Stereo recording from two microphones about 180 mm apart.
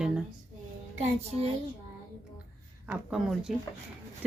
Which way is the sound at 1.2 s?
35° right (ahead or behind).